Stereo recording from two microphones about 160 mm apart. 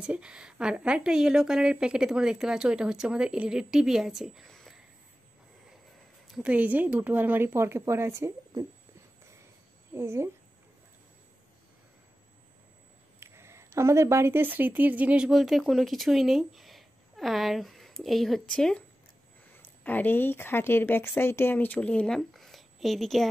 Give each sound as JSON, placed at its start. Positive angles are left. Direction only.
{"t": 0.0, "sound": "a woman's voice", "side_deg": -5}
{"t": 6.2, "sound": "a woman's voice", "side_deg": -5}
{"t": 9.9, "sound": "a woman's voice", "side_deg": -15}
{"t": 13.2, "sound": "speech", "side_deg": -15}